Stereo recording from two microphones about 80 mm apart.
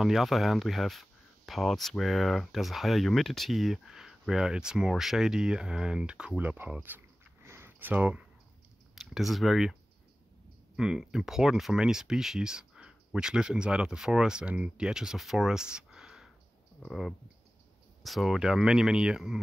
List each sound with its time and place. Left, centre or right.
0.0 s speech: centre; by 7.0 s right
7.4 s a sound: right
7.9 s speech: centre
8.9 s speech: centre
10.8 s speech: centre
18.0 s speech: centre